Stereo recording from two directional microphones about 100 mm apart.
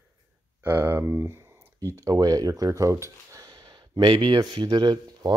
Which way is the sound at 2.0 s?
35° right (ahead or behind).